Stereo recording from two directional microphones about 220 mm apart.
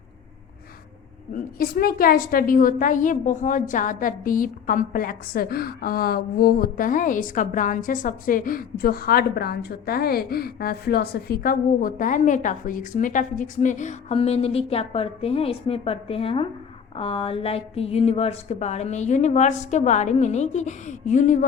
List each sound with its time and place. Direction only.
1.3 s a woman's voice: 40° left (ahead or behind)